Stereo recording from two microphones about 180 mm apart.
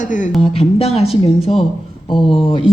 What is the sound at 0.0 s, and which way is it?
Speech, 45° left (ahead or behind).